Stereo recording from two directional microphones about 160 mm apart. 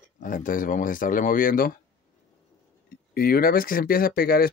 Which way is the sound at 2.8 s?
70° left (ahead or behind).